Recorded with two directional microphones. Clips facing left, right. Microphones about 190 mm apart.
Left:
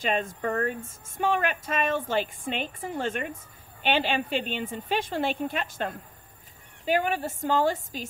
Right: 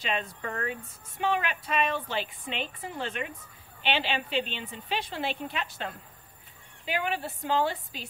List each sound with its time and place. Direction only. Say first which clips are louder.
0.0 s speech: left 5 dB; 45° left (ahead or behind)